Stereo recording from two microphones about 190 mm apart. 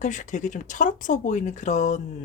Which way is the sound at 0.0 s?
40° left (ahead or behind).